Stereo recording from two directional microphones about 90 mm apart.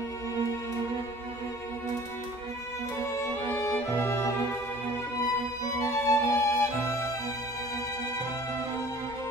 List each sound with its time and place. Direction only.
3.2 s music: 30° left (ahead or behind)
5.8 s music: 30° left (ahead or behind)